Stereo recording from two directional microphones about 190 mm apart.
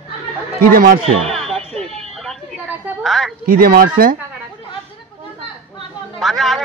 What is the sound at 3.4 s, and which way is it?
Speech, 50° right (ahead or behind).